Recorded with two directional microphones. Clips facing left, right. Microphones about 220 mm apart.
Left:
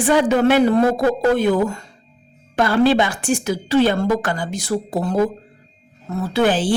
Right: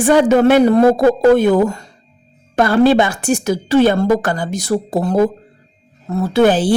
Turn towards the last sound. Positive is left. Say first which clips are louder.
# right 5 dB
turn(degrees=-40)  # may be behind; listen again after turning